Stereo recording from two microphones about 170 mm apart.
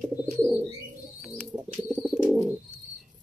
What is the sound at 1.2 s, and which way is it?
Bird, centre (ahead or behind).